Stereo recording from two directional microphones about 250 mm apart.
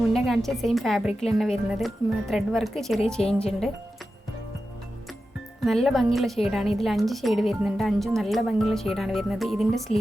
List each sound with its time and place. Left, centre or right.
0.1 s speech: centre
5.6 s speech: centre